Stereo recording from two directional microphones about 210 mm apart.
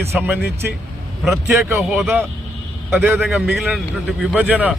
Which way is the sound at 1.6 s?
Centre (ahead or behind).